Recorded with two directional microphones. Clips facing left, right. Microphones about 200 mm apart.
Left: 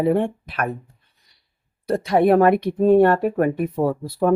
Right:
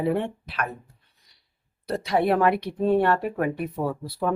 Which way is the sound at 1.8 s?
50° left (ahead or behind).